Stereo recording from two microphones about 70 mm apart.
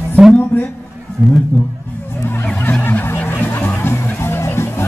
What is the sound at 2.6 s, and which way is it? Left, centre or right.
Music, left.